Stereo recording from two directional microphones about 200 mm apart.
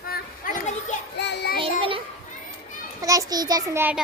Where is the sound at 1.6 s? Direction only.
25° right (ahead or behind).